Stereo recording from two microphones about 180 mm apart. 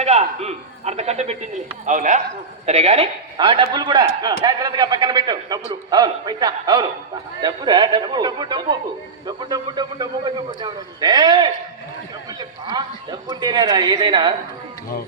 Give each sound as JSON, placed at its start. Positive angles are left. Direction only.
{"t": 0.0, "sound": "a man's voice", "side_deg": -35}